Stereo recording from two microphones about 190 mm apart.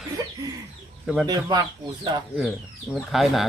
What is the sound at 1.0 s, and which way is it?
Speech, centre (ahead or behind).